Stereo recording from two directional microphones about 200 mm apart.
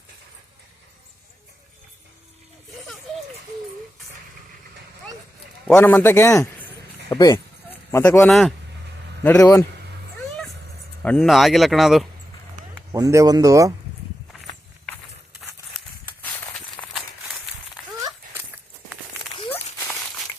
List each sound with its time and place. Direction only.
5.6 s a man's voice: 10° left (ahead or behind)
8.3 s speech: centre (ahead or behind)
9.2 s a man's voice: 10° left (ahead or behind)
11.0 s speech: 5° left (ahead or behind)
12.9 s speech: 15° right (ahead or behind)
16.2 s walk: 5° left (ahead or behind)
17.8 s a sound: centre (ahead or behind)
19.4 s a sound: 30° left (ahead or behind)
19.8 s a sound: 10° left (ahead or behind)